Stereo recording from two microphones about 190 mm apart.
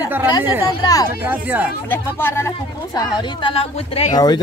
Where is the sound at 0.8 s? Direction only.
20° left (ahead or behind).